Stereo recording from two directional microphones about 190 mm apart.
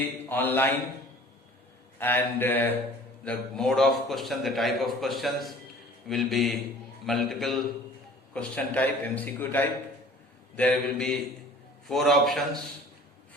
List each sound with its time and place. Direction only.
0.3 s a man's voice: 10° left (ahead or behind)
2.0 s a man's voice: 10° left (ahead or behind)